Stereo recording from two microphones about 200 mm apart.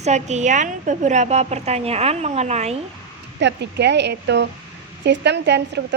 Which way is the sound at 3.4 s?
60° right (ahead or behind).